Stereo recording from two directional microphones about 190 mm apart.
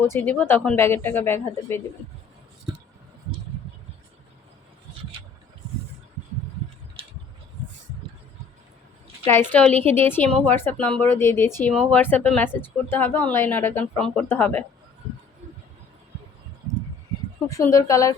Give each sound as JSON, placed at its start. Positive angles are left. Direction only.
{"t": 0.0, "sound": "a woman's voice", "side_deg": 10}
{"t": 9.2, "sound": "a woman's voice", "side_deg": 10}
{"t": 17.5, "sound": "a woman's voice", "side_deg": 15}